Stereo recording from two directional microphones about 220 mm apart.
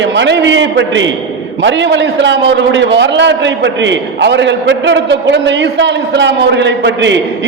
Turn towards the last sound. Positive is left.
turn(degrees=-55)  # may be behind; listen again after turning